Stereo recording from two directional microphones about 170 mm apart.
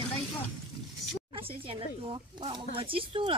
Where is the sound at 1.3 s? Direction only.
30° right (ahead or behind).